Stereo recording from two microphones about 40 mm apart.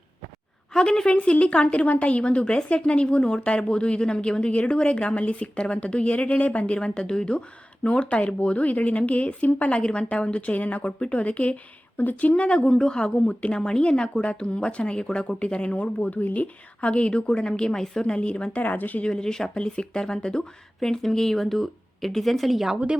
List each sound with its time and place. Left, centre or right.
0.7 s a woman's voice: centre; by 6.7 s left
6.7 s a woman's voice: left
11.9 s speech: left
12.3 s a woman's voice: left
16.0 s a woman's voice: left; by 17.8 s centre
18.0 s a woman's voice: left
18.6 s speech: left
19.0 s speech: centre
19.5 s a woman's voice: left; by 22.7 s centre